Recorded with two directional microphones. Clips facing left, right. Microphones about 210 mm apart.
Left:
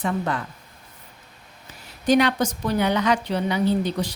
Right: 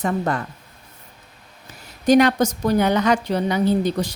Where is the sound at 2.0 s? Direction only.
45° right (ahead or behind).